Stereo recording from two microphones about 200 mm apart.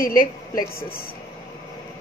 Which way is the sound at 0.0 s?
45° left (ahead or behind).